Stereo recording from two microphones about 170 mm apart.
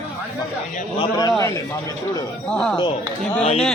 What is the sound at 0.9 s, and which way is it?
Speech, 25° left (ahead or behind).